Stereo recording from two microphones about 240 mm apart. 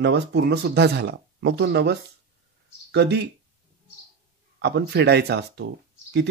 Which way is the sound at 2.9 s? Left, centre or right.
Right.